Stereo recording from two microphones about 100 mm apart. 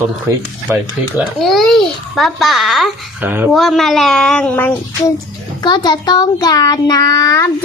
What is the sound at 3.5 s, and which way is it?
Child singing, centre (ahead or behind).